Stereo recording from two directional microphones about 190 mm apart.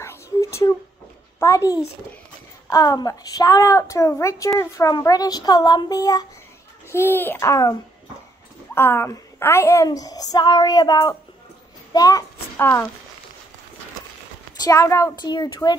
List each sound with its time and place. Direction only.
0.0 s a sound: 15° left (ahead or behind)
1.4 s a child's voice: 15° left (ahead or behind)
8.7 s a woman's voice: 10° left (ahead or behind)
14.6 s a woman's voice: 15° left (ahead or behind)